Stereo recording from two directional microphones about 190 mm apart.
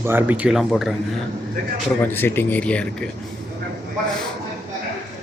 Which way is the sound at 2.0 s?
10° left (ahead or behind).